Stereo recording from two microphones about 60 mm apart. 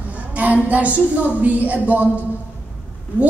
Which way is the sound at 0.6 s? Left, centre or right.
Right.